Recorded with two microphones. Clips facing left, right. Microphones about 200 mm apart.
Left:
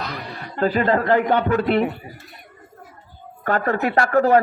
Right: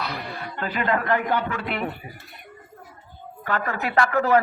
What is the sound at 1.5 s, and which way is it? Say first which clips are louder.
Speech: left 10 dB; 40° left (ahead or behind).